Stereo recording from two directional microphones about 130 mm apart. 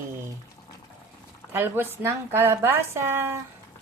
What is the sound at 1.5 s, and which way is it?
A woman's voice, 15° right (ahead or behind).